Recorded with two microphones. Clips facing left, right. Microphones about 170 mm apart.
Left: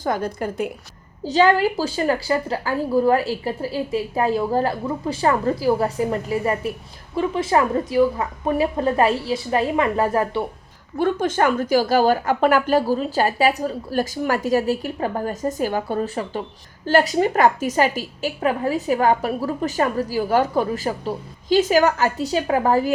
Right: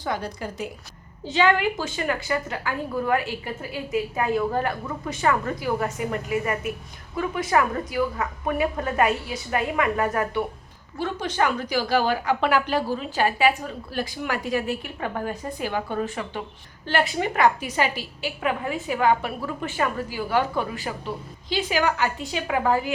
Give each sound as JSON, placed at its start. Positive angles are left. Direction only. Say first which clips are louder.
{"t": 0.0, "sound": "a woman's voice", "louder": "left 6 dB", "side_deg": 45}
{"t": 1.2, "sound": "a woman's voice", "louder": "left 5 dB", "side_deg": 40}
{"t": 10.9, "sound": "a woman's voice", "louder": "left 6 dB", "side_deg": 50}